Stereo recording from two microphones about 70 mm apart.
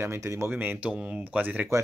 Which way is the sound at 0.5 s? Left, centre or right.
Right.